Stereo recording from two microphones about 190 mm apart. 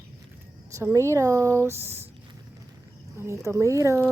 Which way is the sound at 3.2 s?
15° right (ahead or behind).